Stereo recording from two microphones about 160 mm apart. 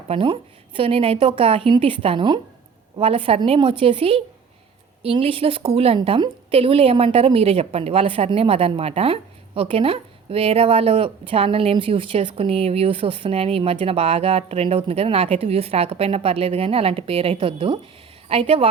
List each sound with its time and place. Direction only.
0.1 s speech: 35° right (ahead or behind)